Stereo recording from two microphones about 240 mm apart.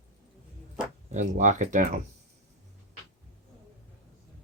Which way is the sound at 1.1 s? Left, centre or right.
Right.